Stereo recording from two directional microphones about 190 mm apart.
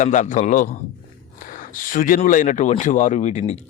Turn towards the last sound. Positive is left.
turn(degrees=35)  # may be behind; listen again after turning